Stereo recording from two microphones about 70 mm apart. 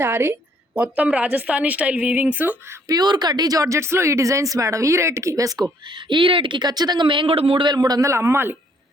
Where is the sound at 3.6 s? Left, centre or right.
Right.